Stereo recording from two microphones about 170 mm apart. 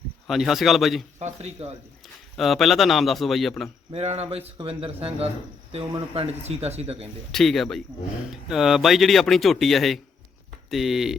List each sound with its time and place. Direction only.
0.3 s speech: centre (ahead or behind)
1.2 s speech: 40° right (ahead or behind)
2.3 s speech: centre (ahead or behind)
3.9 s speech: 40° right (ahead or behind)
7.3 s speech: centre (ahead or behind)